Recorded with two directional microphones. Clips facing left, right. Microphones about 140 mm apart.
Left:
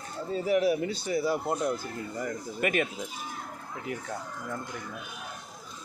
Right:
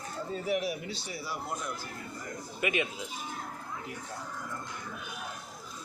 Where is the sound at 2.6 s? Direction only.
45° left (ahead or behind).